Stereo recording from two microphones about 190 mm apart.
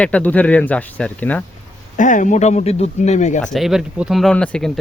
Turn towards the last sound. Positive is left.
turn(degrees=5)  # may be behind; listen again after turning